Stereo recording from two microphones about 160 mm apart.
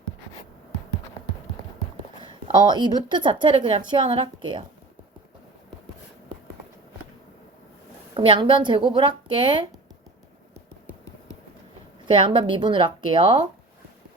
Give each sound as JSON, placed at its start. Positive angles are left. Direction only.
{"t": 2.5, "sound": "a woman's voice", "side_deg": -25}
{"t": 8.1, "sound": "a woman's voice", "side_deg": -30}
{"t": 12.0, "sound": "a woman's voice", "side_deg": -30}